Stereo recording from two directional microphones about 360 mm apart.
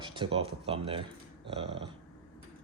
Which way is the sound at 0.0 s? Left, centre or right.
Centre.